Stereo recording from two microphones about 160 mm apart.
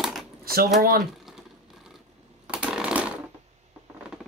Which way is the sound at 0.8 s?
60° right (ahead or behind).